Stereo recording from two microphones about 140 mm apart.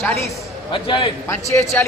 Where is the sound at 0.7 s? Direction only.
35° left (ahead or behind).